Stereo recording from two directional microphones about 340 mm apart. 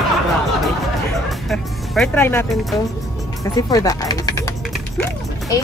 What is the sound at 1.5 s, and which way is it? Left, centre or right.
Speech, centre.